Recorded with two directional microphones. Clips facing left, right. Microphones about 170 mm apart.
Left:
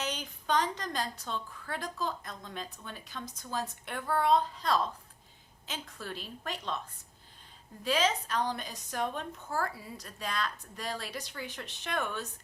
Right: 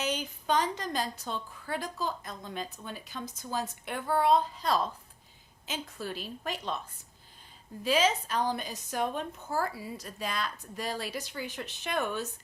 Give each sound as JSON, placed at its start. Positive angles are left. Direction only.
{"t": 0.0, "sound": "a woman's voice", "side_deg": -5}
{"t": 6.0, "sound": "a woman's voice", "side_deg": -5}
{"t": 7.9, "sound": "a woman's voice", "side_deg": -5}